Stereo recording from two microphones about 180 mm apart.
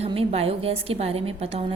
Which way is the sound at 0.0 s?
35° right (ahead or behind).